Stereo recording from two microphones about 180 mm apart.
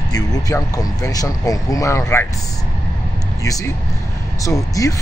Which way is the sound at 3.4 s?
20° left (ahead or behind).